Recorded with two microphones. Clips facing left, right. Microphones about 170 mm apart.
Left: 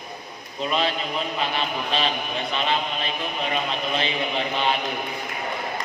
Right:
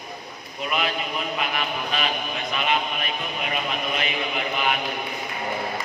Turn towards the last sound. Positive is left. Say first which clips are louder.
# left 1 dB
turn(degrees=30)  # may be behind; listen again after turning